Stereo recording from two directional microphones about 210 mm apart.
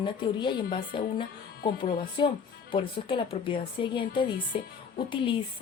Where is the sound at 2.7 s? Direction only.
25° left (ahead or behind).